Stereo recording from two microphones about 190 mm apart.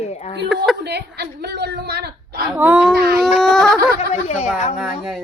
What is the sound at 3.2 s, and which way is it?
Speech, centre (ahead or behind).